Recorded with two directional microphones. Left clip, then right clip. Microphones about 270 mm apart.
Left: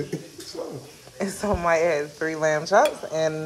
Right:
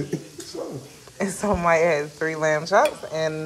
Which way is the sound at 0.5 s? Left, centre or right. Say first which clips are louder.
Right 1 dB; centre.